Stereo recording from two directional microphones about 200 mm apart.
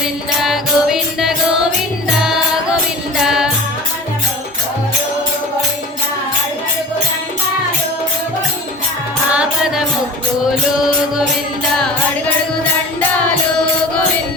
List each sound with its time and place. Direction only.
0.4 s music: centre (ahead or behind)
9.3 s music: 5° right (ahead or behind)